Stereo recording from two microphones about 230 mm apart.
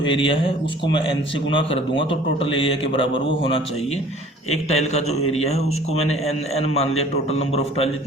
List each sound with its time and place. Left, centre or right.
0.1 s a man's voice: left
4.5 s a man's voice: left